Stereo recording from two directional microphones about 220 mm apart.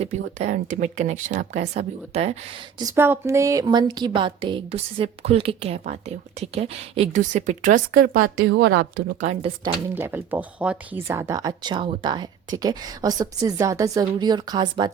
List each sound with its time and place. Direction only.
0.0 s speech: 30° right (ahead or behind)
2.8 s speech: 10° right (ahead or behind); by 9.0 s 50° right (ahead or behind)
9.2 s speech: 30° right (ahead or behind)
9.9 s a woman's voice: 10° right (ahead or behind)